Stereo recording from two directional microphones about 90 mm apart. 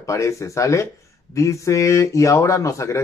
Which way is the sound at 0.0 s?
35° left (ahead or behind).